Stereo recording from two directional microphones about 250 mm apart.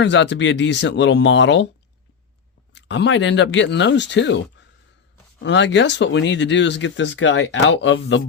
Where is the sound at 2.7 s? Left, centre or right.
Left.